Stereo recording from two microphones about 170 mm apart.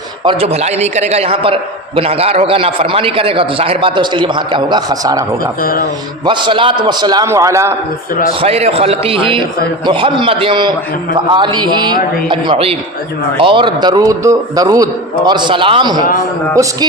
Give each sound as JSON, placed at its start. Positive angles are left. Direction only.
{"t": 0.3, "sound": "a man's voice", "side_deg": -35}
{"t": 6.2, "sound": "a man's voice", "side_deg": -30}
{"t": 8.4, "sound": "a man's voice", "side_deg": -35}